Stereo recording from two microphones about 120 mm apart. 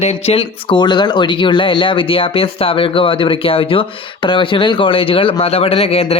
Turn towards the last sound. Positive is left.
turn(degrees=55)  # may be behind; listen again after turning